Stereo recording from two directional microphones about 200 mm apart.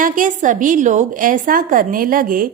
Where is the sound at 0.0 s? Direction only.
40° right (ahead or behind).